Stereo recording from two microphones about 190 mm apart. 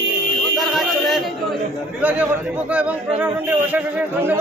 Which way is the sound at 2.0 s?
10° right (ahead or behind).